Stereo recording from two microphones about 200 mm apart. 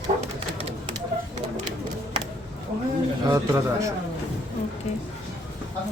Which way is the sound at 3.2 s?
15° right (ahead or behind).